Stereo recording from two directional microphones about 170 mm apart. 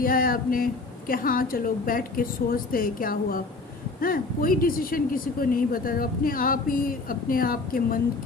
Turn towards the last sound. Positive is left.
turn(degrees=55)  # may be behind; listen again after turning